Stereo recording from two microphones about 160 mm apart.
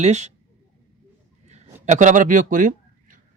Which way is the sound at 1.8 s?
50° right (ahead or behind).